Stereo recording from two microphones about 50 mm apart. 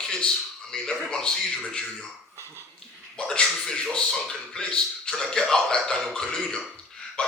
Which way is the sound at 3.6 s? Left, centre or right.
Centre.